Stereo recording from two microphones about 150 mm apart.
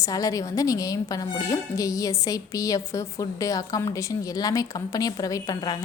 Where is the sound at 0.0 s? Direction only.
25° left (ahead or behind).